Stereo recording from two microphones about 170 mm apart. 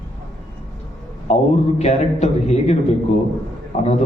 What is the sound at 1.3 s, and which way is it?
A man's voice, 40° left (ahead or behind).